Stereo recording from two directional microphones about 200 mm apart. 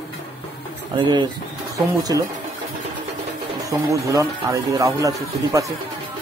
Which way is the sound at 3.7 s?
15° right (ahead or behind).